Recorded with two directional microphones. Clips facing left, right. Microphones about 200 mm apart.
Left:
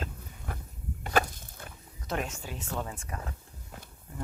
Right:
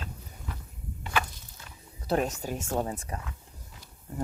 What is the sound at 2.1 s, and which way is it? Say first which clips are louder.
Speech: right 7 dB; 40° right (ahead or behind).